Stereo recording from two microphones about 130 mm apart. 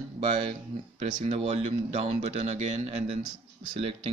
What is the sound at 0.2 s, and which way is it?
Speech, 50° right (ahead or behind).